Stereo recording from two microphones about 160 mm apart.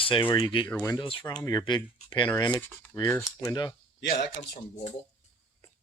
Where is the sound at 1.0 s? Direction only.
30° left (ahead or behind).